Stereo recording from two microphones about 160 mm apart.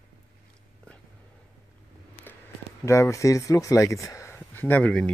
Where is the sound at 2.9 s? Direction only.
20° left (ahead or behind).